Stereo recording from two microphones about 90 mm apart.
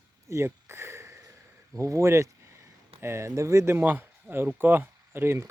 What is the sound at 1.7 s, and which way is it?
Speech, 35° right (ahead or behind).